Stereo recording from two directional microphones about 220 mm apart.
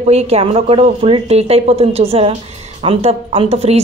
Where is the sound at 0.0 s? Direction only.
30° right (ahead or behind).